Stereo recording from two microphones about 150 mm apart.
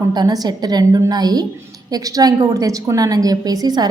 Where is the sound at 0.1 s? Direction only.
25° right (ahead or behind).